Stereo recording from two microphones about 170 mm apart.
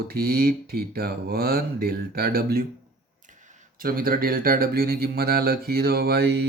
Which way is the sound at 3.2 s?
45° right (ahead or behind).